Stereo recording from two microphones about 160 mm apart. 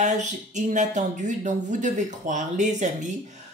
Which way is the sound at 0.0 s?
50° right (ahead or behind).